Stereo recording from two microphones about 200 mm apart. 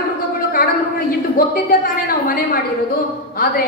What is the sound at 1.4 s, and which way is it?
A woman's voice, 45° left (ahead or behind).